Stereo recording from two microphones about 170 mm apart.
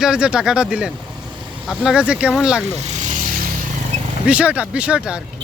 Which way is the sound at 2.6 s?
40° right (ahead or behind).